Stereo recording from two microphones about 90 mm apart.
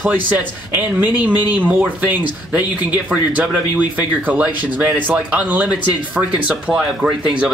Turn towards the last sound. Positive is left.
turn(degrees=-15)  # may be behind; listen again after turning